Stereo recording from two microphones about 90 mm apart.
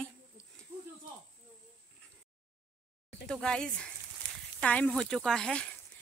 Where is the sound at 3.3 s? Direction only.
5° left (ahead or behind).